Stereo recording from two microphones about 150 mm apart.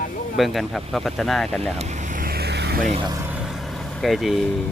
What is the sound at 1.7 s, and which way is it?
Vehicle, 50° right (ahead or behind).